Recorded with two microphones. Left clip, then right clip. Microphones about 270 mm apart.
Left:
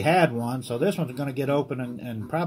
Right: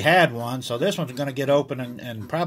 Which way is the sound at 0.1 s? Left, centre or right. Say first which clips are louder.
Right 3 dB; right.